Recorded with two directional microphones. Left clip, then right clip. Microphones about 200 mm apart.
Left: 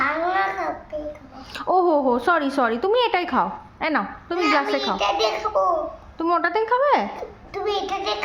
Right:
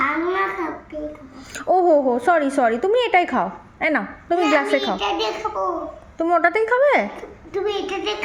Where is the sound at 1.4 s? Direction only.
5° left (ahead or behind).